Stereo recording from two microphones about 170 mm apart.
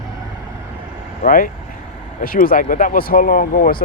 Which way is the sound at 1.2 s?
55° left (ahead or behind).